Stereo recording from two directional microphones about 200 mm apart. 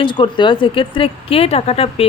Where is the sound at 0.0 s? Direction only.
25° left (ahead or behind).